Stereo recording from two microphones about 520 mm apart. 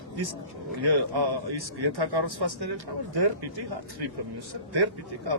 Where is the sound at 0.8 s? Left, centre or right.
Right.